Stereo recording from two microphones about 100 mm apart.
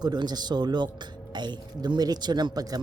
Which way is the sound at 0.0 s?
45° right (ahead or behind).